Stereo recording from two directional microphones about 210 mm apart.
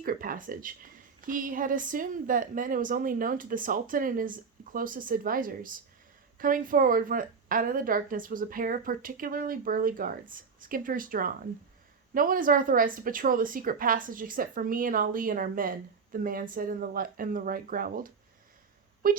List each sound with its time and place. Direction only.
0.0 s a woman's voice: 40° right (ahead or behind)